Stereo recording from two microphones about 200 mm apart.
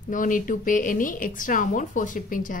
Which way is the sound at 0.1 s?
40° left (ahead or behind).